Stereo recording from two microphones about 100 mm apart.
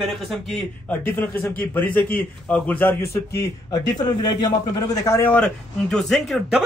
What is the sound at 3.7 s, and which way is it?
A man's voice, 45° left (ahead or behind).